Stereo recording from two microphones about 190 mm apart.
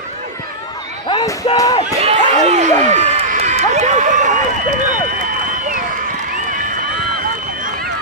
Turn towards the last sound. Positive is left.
turn(degrees=-45)  # may be behind; listen again after turning